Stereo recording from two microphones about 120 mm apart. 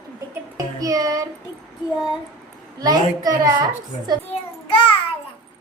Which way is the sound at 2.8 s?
30° right (ahead or behind).